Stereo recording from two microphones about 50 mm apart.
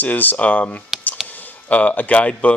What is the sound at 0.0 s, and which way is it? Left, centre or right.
Speech, left.